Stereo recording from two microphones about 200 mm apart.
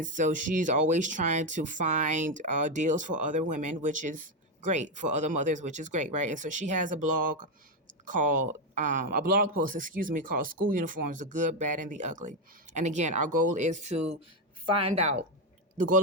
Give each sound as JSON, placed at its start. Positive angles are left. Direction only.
{"t": 0.0, "sound": "a woman's voice", "side_deg": -40}